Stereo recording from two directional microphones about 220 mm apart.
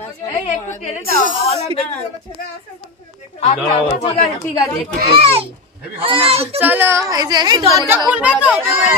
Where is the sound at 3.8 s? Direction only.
30° left (ahead or behind).